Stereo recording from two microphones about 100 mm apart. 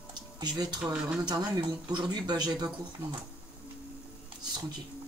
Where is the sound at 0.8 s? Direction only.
10° right (ahead or behind).